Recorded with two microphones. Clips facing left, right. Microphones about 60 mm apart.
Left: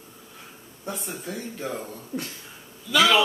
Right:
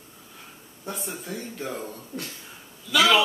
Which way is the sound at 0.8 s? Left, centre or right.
Centre.